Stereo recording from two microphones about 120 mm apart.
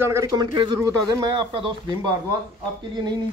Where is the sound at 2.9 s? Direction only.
40° right (ahead or behind).